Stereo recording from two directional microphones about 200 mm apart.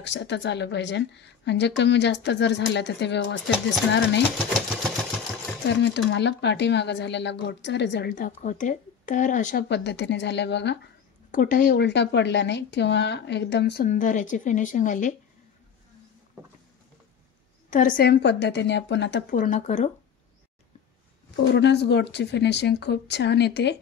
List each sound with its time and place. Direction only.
0.0 s a woman's voice: 60° left (ahead or behind)
5.7 s a woman's voice: 60° left (ahead or behind)
8.4 s speech: 40° left (ahead or behind)
9.7 s a woman's voice: 60° left (ahead or behind)
11.3 s speech: 40° left (ahead or behind)
11.7 s a woman's voice: 60° left (ahead or behind)
13.8 s speech: 40° left (ahead or behind)
17.6 s a woman's voice: 40° left (ahead or behind); by 19.2 s 60° left (ahead or behind)
19.3 s speech: 40° left (ahead or behind)
21.5 s a woman's voice: 60° left (ahead or behind)